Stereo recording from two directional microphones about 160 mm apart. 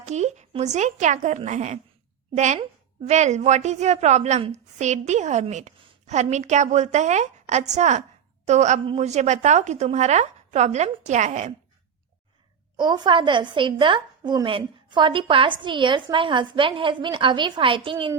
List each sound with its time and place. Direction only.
0.0 s a woman's voice: 45° right (ahead or behind)
12.7 s a woman's voice: 30° right (ahead or behind)